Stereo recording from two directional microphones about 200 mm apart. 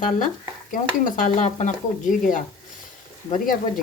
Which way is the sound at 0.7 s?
40° left (ahead or behind).